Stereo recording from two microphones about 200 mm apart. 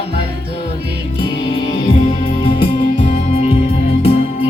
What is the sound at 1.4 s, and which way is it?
Music, 30° left (ahead or behind).